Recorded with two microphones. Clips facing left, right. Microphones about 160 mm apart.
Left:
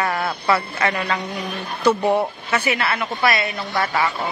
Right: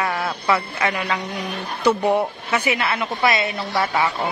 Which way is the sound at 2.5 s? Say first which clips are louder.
Even; 15° right (ahead or behind).